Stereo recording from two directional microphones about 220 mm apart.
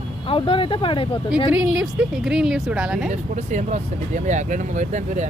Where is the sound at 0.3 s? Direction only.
25° left (ahead or behind).